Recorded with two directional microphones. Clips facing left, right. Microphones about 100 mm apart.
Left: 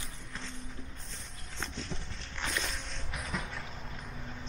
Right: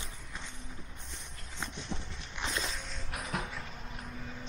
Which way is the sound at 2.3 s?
15° right (ahead or behind).